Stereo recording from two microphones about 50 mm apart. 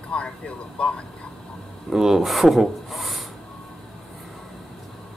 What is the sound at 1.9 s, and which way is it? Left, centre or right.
Speech, centre.